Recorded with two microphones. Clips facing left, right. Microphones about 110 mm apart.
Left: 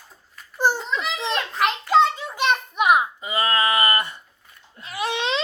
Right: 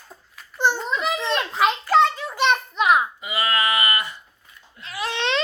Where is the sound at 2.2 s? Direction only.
5° left (ahead or behind).